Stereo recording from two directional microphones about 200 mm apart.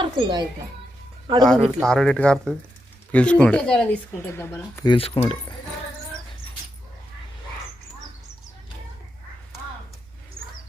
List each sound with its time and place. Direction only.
0.0 s a child's voice: 25° right (ahead or behind)
1.4 s speech: 5° left (ahead or behind)
4.9 s speech: 30° left (ahead or behind)